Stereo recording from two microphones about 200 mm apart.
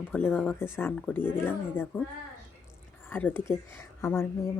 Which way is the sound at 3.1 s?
10° left (ahead or behind).